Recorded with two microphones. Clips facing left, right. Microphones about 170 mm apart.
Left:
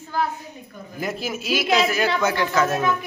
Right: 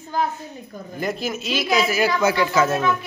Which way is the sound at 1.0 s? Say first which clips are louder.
Right 2 dB; 5° left (ahead or behind).